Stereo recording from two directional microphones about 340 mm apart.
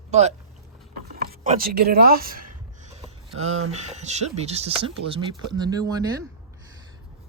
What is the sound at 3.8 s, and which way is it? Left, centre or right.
Speech, centre.